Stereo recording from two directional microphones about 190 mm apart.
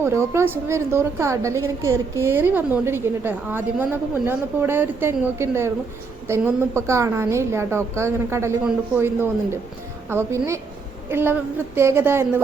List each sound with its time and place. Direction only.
0.0 s a woman's voice: 15° right (ahead or behind)